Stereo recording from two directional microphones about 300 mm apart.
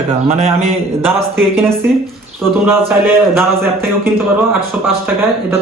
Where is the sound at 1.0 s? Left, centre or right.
Centre.